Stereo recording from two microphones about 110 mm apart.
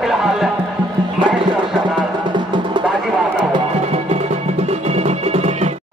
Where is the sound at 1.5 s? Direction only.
45° right (ahead or behind).